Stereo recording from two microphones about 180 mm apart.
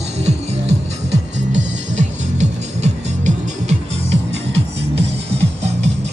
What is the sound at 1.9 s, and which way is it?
Music, 40° right (ahead or behind).